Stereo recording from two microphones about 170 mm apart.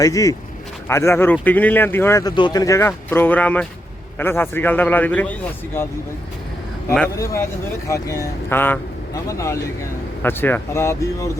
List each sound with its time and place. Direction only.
0.0 s a man's voice: 20° left (ahead or behind)
7.9 s a man's voice: 20° left (ahead or behind)